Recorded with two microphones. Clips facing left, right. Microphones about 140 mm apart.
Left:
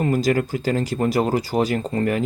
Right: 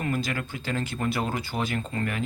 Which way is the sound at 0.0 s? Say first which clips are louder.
Left 10 dB; 40° left (ahead or behind).